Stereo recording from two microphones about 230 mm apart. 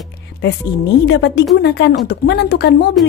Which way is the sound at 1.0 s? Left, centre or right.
Left.